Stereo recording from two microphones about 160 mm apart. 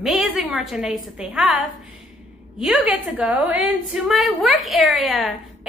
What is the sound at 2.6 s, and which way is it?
A woman's voice, 5° right (ahead or behind).